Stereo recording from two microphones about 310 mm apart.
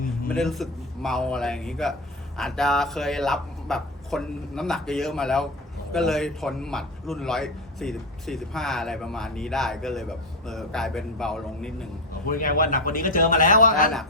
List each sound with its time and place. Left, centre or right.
0.0 s a sound: left
0.3 s speech: centre
12.3 s a man's voice: left